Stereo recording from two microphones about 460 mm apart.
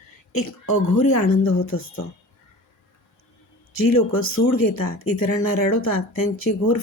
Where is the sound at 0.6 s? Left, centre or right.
Left.